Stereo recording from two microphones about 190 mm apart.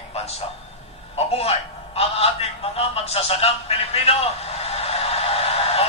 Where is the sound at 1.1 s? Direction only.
30° left (ahead or behind).